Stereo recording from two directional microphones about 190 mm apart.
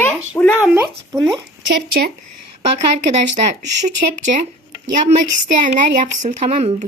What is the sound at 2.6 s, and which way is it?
Speech, 35° right (ahead or behind).